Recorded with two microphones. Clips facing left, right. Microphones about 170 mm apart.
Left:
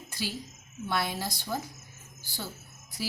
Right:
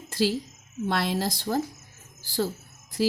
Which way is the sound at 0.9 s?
90° right.